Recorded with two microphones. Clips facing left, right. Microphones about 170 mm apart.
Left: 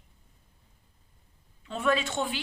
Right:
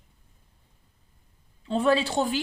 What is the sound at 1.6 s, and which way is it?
Speech, 30° right (ahead or behind).